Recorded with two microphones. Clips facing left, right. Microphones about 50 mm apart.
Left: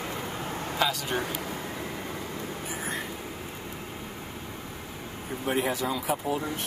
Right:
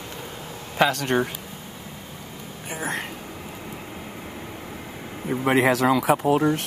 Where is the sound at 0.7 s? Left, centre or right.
Right.